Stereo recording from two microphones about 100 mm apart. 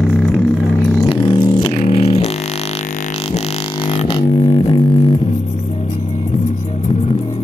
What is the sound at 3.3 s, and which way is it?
Didgeridoo, 80° left.